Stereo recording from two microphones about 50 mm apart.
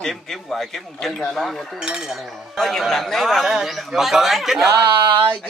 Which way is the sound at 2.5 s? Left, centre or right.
Centre.